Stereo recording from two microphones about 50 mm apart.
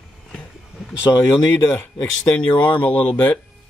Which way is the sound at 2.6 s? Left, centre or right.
Left.